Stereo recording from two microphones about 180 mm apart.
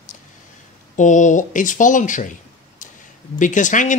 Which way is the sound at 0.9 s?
45° left (ahead or behind).